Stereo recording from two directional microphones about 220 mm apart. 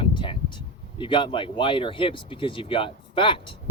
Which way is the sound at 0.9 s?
20° left (ahead or behind).